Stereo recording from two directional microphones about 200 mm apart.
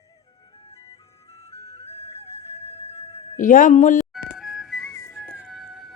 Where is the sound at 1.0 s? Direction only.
15° left (ahead or behind).